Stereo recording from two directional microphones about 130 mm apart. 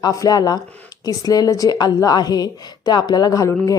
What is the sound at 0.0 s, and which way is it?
A woman's voice, 25° left (ahead or behind).